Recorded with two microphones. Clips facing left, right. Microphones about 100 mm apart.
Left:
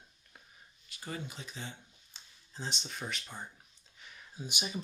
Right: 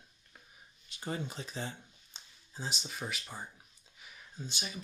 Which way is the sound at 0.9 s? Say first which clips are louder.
Right 4 dB; 30° right (ahead or behind).